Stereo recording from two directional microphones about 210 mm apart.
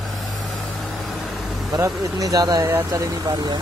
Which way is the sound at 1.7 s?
15° right (ahead or behind).